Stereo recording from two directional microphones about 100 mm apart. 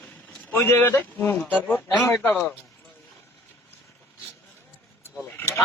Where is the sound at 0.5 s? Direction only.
20° left (ahead or behind).